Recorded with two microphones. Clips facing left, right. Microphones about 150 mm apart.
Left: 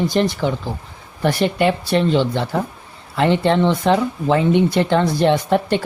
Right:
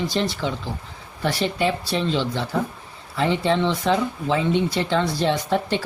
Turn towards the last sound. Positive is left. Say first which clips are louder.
# left 5 dB
turn(degrees=55)  # may be behind; listen again after turning